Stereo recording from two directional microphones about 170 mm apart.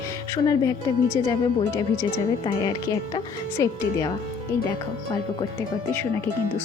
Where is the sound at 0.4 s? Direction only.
20° left (ahead or behind).